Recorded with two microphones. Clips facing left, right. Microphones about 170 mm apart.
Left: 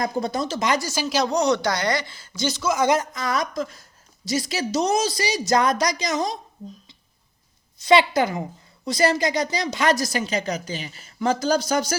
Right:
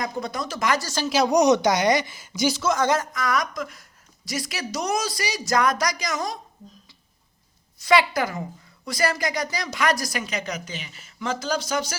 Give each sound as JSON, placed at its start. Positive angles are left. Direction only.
{"t": 0.0, "sound": "a woman's voice", "side_deg": 30}
{"t": 1.0, "sound": "speech", "side_deg": -5}
{"t": 1.3, "sound": "speech", "side_deg": -20}
{"t": 2.6, "sound": "speech", "side_deg": 0}
{"t": 2.8, "sound": "a woman's voice", "side_deg": 15}
{"t": 7.8, "sound": "a woman's voice", "side_deg": 25}